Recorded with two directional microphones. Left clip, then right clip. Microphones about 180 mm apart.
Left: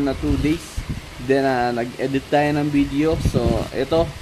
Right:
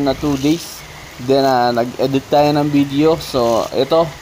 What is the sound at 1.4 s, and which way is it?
Speech, 5° left (ahead or behind).